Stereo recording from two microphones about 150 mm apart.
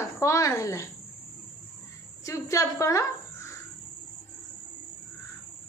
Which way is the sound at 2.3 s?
20° left (ahead or behind).